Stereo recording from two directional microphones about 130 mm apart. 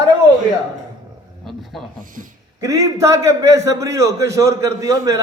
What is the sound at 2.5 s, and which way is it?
A man's voice, 25° right (ahead or behind).